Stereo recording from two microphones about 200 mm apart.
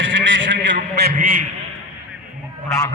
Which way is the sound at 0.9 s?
50° right (ahead or behind).